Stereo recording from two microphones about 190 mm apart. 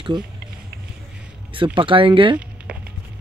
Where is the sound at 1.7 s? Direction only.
25° right (ahead or behind).